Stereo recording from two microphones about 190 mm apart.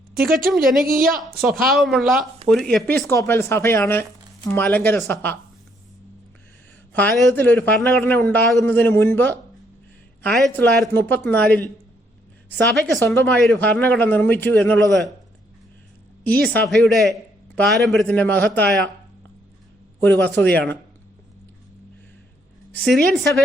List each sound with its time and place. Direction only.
0.5 s a woman's voice: centre (ahead or behind)
0.9 s a woman's voice: 50° right (ahead or behind)
1.4 s a woman's voice: centre (ahead or behind)
6.9 s a man's voice: 5° left (ahead or behind)
10.2 s a woman's voice: centre (ahead or behind)
16.5 s a woman's voice: 5° left (ahead or behind)
20.0 s a man's voice: 10° left (ahead or behind)
22.7 s a woman's voice: centre (ahead or behind)